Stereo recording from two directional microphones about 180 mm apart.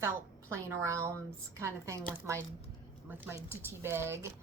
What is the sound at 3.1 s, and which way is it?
A woman's voice, 10° right (ahead or behind).